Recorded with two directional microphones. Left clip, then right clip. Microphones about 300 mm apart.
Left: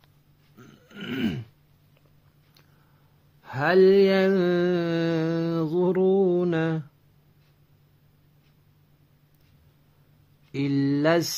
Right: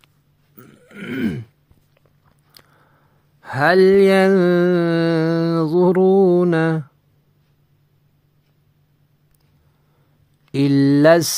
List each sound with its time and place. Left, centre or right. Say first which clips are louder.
0.6 s burping: right 5 dB; centre
3.4 s mantra: right 5 dB; right
10.5 s speech: right 10 dB; right